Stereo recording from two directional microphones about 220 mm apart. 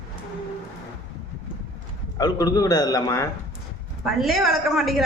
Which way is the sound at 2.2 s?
15° left (ahead or behind).